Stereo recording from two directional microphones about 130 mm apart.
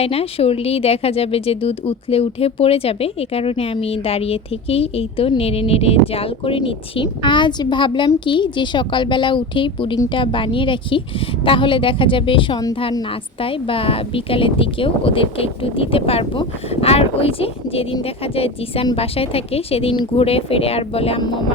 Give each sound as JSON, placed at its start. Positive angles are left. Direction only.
{"t": 0.0, "sound": "speech", "side_deg": 50}